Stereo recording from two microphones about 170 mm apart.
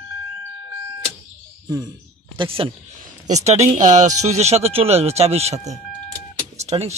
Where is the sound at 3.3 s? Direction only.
40° right (ahead or behind).